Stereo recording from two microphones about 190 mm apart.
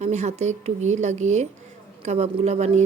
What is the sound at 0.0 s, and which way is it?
A woman's voice, 35° right (ahead or behind).